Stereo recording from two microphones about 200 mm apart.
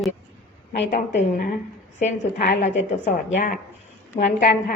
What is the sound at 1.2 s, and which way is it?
A woman's voice, 45° left (ahead or behind).